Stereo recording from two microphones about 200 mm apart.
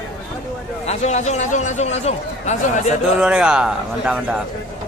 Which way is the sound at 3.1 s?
5° right (ahead or behind).